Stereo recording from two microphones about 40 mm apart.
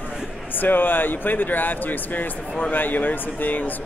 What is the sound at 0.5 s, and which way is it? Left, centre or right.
Speech, left.